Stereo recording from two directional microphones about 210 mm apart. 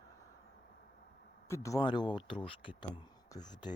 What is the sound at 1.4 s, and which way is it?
Speech, 15° left (ahead or behind).